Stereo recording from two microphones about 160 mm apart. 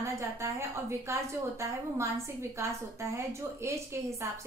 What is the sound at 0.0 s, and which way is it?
A woman's voice, 20° right (ahead or behind).